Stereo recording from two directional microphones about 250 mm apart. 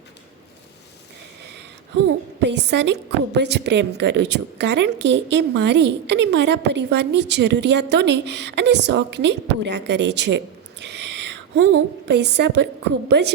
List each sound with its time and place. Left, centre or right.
2.0 s a woman's voice: right